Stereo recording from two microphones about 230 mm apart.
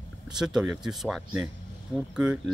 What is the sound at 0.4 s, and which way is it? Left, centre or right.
Speech, centre.